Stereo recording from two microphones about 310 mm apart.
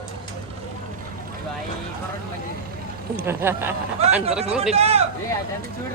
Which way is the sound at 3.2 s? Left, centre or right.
Centre.